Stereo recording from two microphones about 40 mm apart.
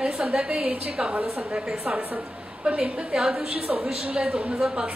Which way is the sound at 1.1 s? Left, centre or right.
Right.